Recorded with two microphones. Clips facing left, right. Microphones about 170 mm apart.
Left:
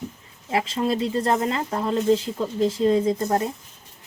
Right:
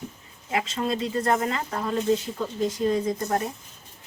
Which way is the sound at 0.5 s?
30° left (ahead or behind).